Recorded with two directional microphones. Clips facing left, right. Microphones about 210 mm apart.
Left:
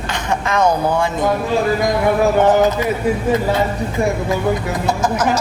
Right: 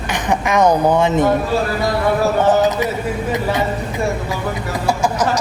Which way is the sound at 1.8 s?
15° left (ahead or behind).